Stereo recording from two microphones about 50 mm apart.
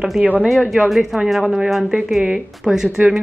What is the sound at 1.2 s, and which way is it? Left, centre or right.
Speech, centre.